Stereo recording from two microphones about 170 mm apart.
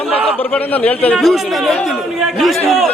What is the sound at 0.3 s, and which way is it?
A man's voice, 10° left (ahead or behind).